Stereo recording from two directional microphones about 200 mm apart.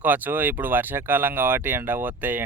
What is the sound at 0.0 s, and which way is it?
Speech, 10° right (ahead or behind).